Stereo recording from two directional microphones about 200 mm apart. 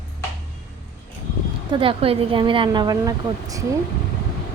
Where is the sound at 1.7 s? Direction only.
25° right (ahead or behind).